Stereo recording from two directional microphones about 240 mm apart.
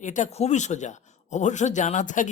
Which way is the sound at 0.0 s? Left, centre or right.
Left.